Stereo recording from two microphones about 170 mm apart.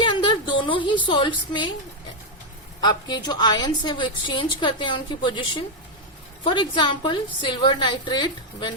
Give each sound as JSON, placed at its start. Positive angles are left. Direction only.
{"t": 0.0, "sound": "a sound", "side_deg": 30}
{"t": 1.0, "sound": "a woman's voice", "side_deg": 30}
{"t": 2.8, "sound": "a woman's voice", "side_deg": 25}